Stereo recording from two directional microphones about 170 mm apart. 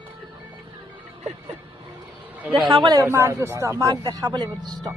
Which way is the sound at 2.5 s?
30° right (ahead or behind).